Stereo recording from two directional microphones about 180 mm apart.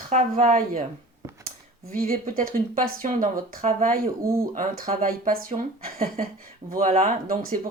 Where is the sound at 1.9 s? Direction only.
50° right (ahead or behind).